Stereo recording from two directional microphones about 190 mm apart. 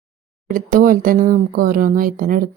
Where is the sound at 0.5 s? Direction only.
45° right (ahead or behind).